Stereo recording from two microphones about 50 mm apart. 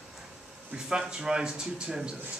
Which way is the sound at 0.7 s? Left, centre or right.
Centre.